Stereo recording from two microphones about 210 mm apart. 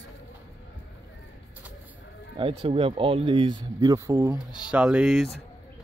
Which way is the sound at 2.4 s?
25° right (ahead or behind).